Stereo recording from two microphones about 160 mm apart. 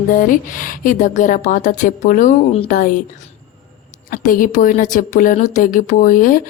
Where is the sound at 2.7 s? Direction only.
55° left (ahead or behind).